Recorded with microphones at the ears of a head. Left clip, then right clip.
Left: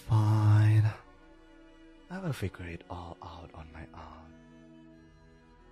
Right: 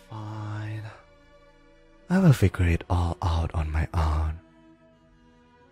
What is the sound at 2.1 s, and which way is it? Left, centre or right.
Speech, right.